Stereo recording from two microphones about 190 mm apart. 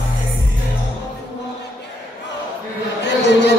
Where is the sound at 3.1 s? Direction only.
65° left (ahead or behind).